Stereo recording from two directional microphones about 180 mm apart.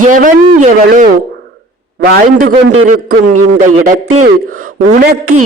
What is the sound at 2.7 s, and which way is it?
Speech, 45° right (ahead or behind).